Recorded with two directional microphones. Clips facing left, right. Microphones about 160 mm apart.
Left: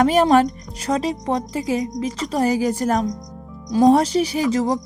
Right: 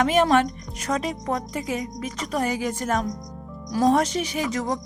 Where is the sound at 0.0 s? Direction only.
35° left (ahead or behind).